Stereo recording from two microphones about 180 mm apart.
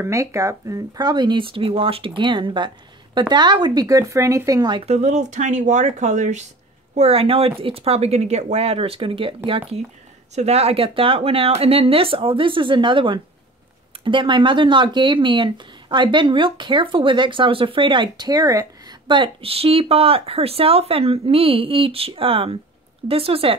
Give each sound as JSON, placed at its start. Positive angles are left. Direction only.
{"t": 0.0, "sound": "speech", "side_deg": -15}
{"t": 10.3, "sound": "speech", "side_deg": -35}